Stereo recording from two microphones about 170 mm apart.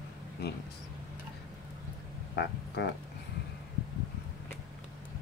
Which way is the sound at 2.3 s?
85° left.